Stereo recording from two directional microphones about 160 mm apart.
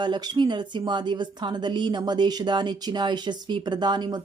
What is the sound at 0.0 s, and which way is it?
A woman's voice, 30° right (ahead or behind).